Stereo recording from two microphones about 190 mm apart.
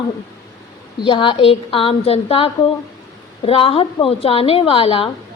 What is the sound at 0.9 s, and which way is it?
A woman's voice, 25° left (ahead or behind).